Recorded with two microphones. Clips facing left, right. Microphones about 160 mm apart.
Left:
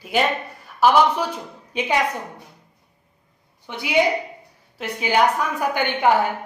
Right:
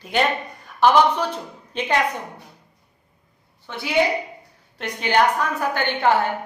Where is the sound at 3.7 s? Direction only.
15° left (ahead or behind).